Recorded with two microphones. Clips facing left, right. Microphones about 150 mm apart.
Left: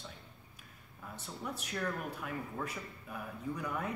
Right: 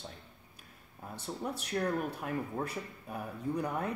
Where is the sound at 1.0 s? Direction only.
35° right (ahead or behind).